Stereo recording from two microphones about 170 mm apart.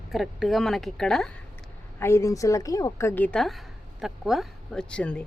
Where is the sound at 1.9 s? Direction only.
15° left (ahead or behind).